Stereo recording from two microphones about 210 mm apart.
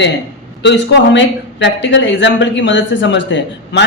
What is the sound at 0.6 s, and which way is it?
A woman's voice, 55° left (ahead or behind).